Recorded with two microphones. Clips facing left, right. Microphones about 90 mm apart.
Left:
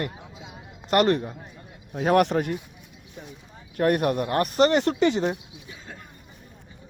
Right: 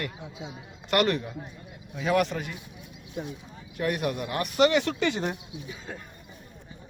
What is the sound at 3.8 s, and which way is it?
A man's voice, 55° left (ahead or behind).